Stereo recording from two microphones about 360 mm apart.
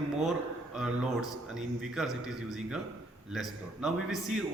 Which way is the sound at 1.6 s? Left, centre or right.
Centre.